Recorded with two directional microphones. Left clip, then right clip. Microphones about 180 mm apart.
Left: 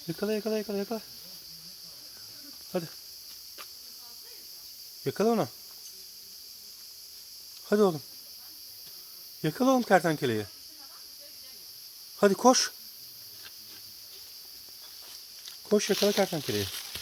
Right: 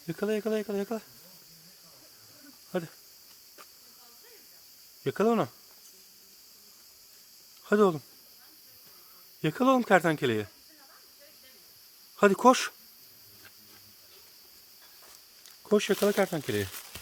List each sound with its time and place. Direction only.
0.1 s speech: 10° right (ahead or behind)
2.7 s speech: 5° right (ahead or behind)
5.0 s speech: 10° right (ahead or behind)
7.7 s speech: 15° right (ahead or behind)
9.4 s speech: 15° right (ahead or behind)
12.2 s speech: 15° right (ahead or behind)
15.7 s speech: 10° right (ahead or behind)